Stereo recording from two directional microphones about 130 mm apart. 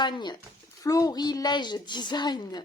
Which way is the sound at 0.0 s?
35° left (ahead or behind).